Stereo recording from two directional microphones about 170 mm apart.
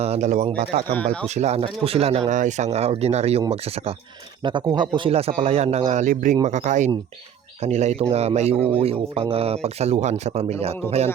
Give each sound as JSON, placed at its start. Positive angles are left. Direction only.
{"t": 0.0, "sound": "speech", "side_deg": -40}
{"t": 0.9, "sound": "speech", "side_deg": 5}
{"t": 1.3, "sound": "speech", "side_deg": -40}
{"t": 4.4, "sound": "speech", "side_deg": -25}